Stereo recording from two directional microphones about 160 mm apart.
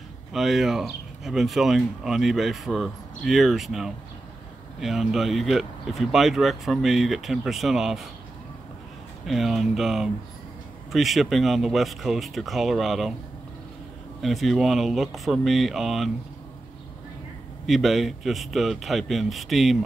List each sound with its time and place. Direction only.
0.3 s speech: centre (ahead or behind)
9.2 s speech: centre (ahead or behind)
14.2 s speech: centre (ahead or behind)
17.6 s speech: centre (ahead or behind)